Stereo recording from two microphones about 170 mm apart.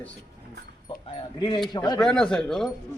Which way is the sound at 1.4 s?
25° left (ahead or behind).